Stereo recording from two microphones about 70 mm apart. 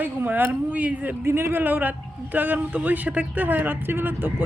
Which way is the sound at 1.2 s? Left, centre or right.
Right.